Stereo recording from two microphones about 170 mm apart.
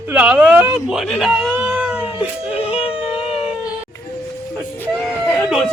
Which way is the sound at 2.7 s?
35° left (ahead or behind).